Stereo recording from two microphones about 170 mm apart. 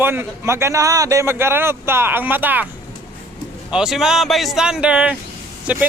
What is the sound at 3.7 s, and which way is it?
A man's voice, 5° right (ahead or behind).